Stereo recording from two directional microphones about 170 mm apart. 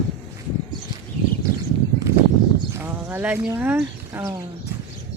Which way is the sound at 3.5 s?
10° right (ahead or behind).